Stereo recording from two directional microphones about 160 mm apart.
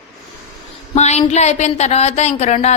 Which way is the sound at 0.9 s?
45° left (ahead or behind).